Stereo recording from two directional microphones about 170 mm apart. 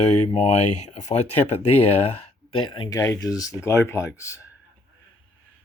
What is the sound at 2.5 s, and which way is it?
Speech, 30° left (ahead or behind).